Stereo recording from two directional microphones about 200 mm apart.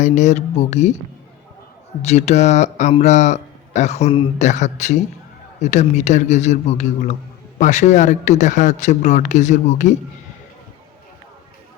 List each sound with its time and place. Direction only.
0.0 s speech: 35° left (ahead or behind)
2.0 s speech: 35° left (ahead or behind)